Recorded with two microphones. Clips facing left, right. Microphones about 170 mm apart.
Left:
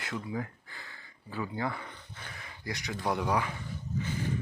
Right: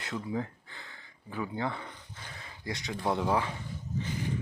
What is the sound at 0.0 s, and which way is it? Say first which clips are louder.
Speech: right 2 dB; 20° right (ahead or behind).